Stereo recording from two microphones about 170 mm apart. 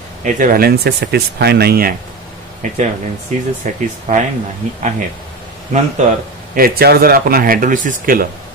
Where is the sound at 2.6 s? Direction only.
45° right (ahead or behind).